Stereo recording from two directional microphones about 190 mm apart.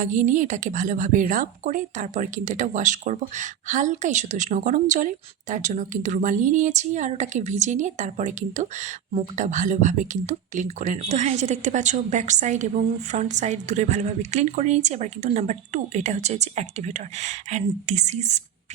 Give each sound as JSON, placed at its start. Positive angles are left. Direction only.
{"t": 0.0, "sound": "speech", "side_deg": -40}